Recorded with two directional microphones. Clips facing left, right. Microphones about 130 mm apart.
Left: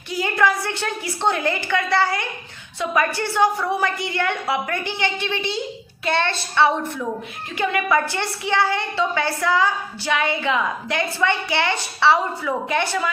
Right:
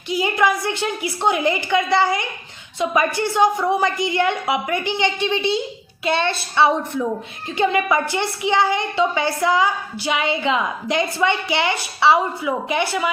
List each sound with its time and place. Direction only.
0.1 s a woman's voice: 15° right (ahead or behind)